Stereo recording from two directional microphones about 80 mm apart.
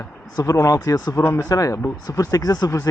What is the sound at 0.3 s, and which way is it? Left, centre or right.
Speech, left.